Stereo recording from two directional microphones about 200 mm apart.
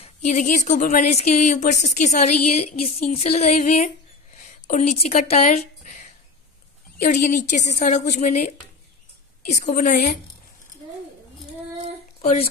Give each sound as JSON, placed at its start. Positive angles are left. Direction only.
{"t": 0.0, "sound": "speech", "side_deg": 35}
{"t": 9.5, "sound": "speech", "side_deg": 40}
{"t": 12.2, "sound": "a woman's voice", "side_deg": 30}